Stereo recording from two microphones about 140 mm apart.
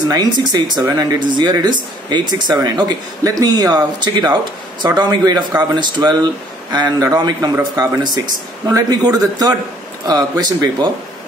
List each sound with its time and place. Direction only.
0.1 s a man's voice: 30° right (ahead or behind)